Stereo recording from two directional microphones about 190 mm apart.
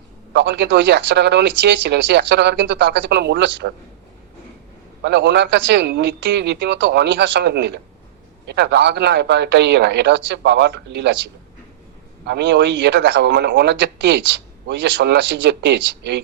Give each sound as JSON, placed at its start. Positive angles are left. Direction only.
{"t": 0.3, "sound": "speech", "side_deg": -65}
{"t": 5.0, "sound": "speech", "side_deg": -65}
{"t": 12.2, "sound": "a man's voice", "side_deg": -65}